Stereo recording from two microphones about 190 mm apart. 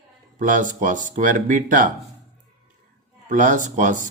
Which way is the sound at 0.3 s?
45° right (ahead or behind).